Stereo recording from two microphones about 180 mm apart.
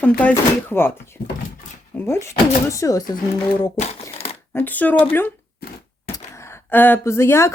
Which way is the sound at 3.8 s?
35° left (ahead or behind).